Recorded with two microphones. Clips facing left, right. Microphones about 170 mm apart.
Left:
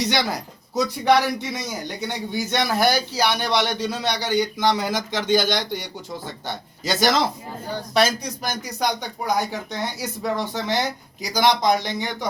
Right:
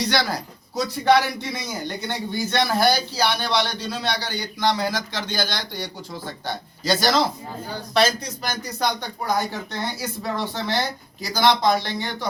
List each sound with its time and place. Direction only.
0.0 s a man's voice: 20° left (ahead or behind)
8.6 s speech: 15° left (ahead or behind)